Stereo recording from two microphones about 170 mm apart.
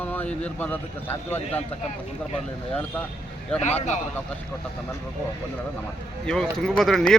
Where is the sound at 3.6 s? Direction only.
45° left (ahead or behind).